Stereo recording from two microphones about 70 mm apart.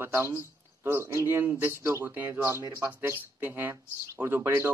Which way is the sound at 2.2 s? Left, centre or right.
Right.